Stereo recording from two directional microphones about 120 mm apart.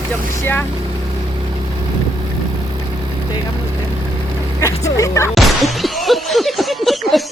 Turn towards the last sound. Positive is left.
turn(degrees=0)  # may be behind; listen again after turning